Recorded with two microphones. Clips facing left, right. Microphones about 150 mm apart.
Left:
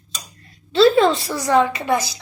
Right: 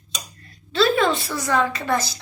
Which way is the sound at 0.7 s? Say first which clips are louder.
Left 5 dB; 30° left (ahead or behind).